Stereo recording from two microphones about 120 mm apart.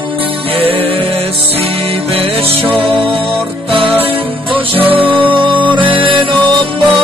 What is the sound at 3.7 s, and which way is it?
Music, 50° right (ahead or behind).